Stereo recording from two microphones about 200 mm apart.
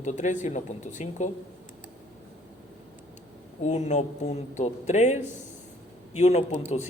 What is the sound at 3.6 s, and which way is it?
A man's voice, 35° left (ahead or behind).